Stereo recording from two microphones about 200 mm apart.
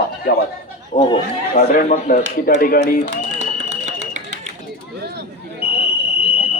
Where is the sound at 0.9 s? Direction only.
35° left (ahead or behind).